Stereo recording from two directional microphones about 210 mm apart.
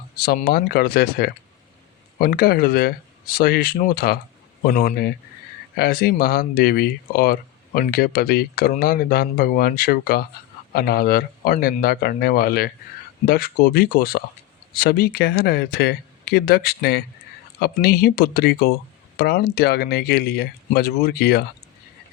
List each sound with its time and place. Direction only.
0.2 s speech: 45° left (ahead or behind)